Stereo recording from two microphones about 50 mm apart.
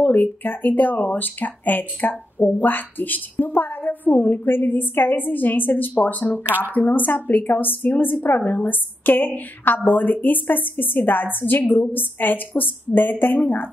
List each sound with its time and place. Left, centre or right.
0.0 s speech: left